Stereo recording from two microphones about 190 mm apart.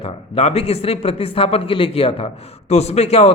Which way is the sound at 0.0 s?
30° left (ahead or behind).